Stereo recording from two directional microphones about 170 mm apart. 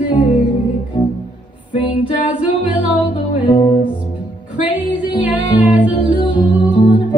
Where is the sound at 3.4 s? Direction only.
25° left (ahead or behind).